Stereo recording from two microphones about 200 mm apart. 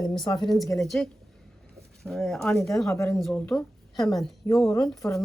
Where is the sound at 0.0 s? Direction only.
20° left (ahead or behind).